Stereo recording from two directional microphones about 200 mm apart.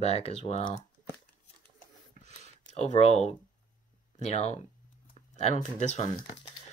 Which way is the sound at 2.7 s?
35° left (ahead or behind).